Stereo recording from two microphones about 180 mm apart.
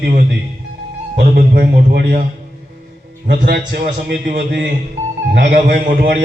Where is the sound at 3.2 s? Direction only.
60° right (ahead or behind).